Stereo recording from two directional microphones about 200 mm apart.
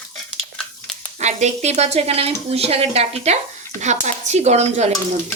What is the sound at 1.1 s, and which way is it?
Speech, 35° right (ahead or behind).